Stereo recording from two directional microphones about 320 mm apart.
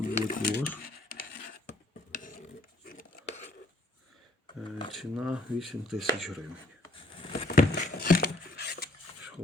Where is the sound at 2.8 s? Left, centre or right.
Left.